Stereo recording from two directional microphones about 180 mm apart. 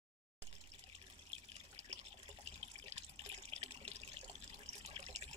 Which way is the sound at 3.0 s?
35° right (ahead or behind).